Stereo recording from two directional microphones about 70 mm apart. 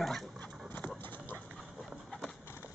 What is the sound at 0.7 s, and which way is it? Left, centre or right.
Clip-clop, left.